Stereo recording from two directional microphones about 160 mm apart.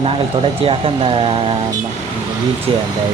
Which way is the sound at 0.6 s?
35° right (ahead or behind).